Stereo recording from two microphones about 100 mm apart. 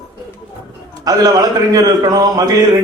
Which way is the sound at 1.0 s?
40° right (ahead or behind).